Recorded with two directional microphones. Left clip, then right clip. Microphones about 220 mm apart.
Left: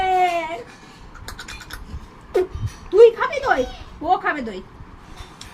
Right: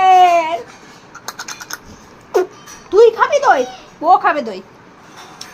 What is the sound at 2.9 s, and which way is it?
A woman's voice, 15° left (ahead or behind).